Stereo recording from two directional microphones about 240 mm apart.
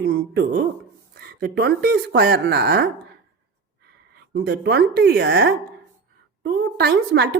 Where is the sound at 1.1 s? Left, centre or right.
Right.